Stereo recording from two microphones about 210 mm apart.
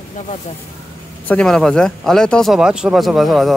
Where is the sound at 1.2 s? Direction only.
5° left (ahead or behind).